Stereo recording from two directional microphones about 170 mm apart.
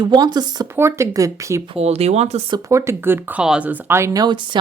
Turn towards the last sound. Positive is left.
turn(degrees=-25)  # may be behind; listen again after turning